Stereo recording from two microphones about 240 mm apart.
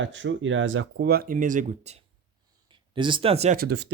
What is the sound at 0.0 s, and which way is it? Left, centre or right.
Speech, right.